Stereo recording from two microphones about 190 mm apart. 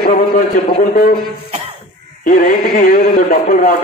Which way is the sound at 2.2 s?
45° left (ahead or behind).